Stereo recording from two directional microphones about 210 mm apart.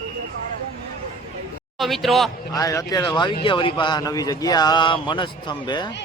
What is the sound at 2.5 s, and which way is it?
A man's voice, 15° left (ahead or behind).